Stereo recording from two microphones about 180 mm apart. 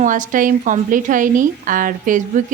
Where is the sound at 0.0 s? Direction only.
45° right (ahead or behind).